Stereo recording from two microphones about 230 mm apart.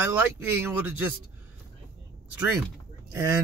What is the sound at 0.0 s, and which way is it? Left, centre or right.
Speech, centre.